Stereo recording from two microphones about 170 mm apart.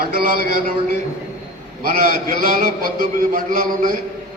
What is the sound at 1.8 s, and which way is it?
A man's voice, 55° right (ahead or behind).